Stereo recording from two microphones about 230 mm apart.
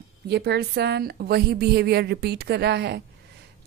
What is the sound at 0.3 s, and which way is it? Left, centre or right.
A woman's voice, right.